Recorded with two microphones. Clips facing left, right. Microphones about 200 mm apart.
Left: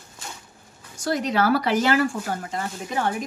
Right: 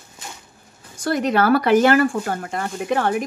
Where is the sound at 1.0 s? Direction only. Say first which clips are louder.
Right 4 dB; 55° right (ahead or behind).